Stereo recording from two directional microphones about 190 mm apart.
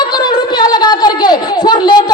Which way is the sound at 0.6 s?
20° left (ahead or behind).